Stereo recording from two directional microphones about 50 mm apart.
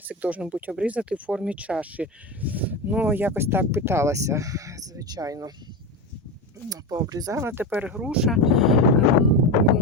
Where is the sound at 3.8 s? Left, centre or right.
Right.